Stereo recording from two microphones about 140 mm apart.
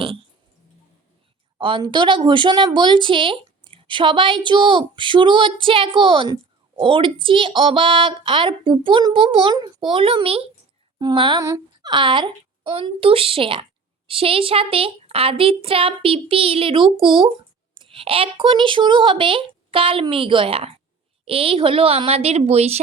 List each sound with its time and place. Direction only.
1.5 s a woman's voice: 35° right (ahead or behind)
11.4 s a sound: 20° right (ahead or behind)
11.9 s a woman's voice: 35° right (ahead or behind)